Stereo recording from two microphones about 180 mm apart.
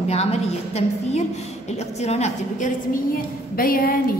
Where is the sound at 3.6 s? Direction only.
55° left (ahead or behind).